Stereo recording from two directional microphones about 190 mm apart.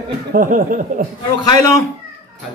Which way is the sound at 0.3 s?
45° right (ahead or behind).